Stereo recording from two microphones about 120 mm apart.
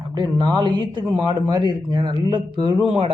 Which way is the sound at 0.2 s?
35° right (ahead or behind).